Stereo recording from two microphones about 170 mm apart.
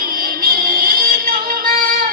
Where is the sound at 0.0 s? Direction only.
60° right (ahead or behind).